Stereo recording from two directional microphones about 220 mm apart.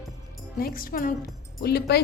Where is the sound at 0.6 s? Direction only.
40° left (ahead or behind).